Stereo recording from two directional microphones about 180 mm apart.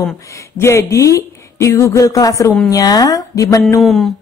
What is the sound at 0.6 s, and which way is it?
A woman's voice, 15° left (ahead or behind).